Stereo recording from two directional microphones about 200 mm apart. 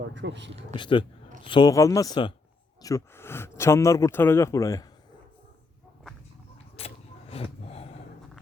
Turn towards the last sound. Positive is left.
turn(degrees=30)  # may be behind; listen again after turning